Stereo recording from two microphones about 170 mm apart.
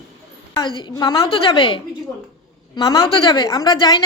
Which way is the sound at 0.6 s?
25° left (ahead or behind).